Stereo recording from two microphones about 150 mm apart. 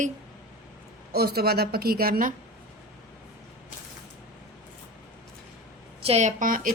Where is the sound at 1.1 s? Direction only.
90° right; by 2.4 s 70° right (ahead or behind).